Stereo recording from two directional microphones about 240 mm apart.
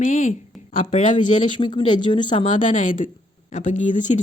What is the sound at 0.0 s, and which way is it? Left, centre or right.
Speech, left.